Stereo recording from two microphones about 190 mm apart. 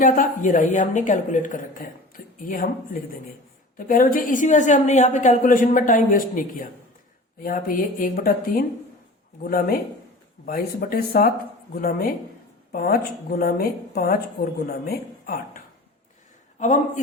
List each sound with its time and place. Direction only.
0.0 s a woman's voice: 45° left (ahead or behind)
16.6 s speech: 40° left (ahead or behind)